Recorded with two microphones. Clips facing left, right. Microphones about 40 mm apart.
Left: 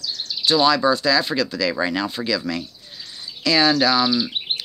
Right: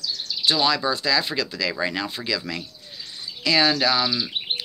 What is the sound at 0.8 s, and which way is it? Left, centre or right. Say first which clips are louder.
Speech: left 5 dB; centre.